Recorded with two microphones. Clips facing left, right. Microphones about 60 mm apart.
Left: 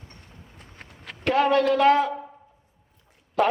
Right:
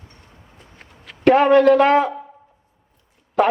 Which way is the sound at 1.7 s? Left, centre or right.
Right.